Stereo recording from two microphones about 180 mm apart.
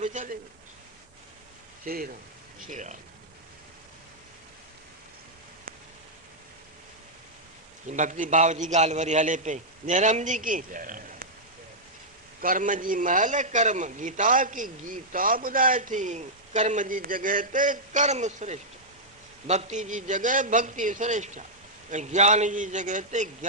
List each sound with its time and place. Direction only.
0.0 s a sound: 45° right (ahead or behind)
1.8 s a man's voice: 50° right (ahead or behind)
7.9 s a man's voice: 45° right (ahead or behind)
12.4 s a man's voice: 50° right (ahead or behind)